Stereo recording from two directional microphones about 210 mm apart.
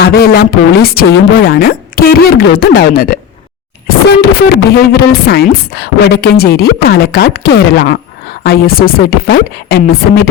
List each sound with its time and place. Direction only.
0.0 s speech: 50° left (ahead or behind)
4.2 s speech: 45° left (ahead or behind)